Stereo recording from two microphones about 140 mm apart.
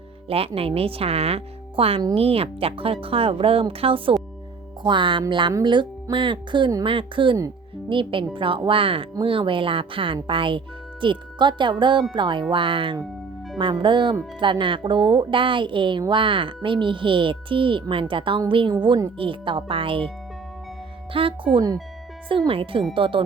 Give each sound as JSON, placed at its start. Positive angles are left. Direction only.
{"t": 0.3, "sound": "speech", "side_deg": -45}
{"t": 21.1, "sound": "speech", "side_deg": -40}